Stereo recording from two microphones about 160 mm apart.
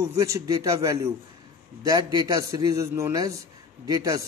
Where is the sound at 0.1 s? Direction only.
20° right (ahead or behind).